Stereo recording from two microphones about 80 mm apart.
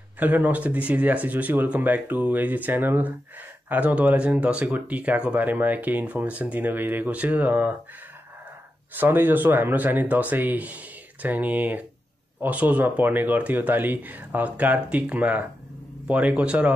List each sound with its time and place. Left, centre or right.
0.2 s speech: right
8.9 s speech: right